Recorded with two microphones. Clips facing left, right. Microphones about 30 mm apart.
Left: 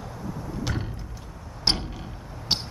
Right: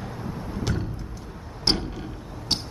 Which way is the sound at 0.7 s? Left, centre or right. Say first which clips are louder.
Right 2 dB; centre.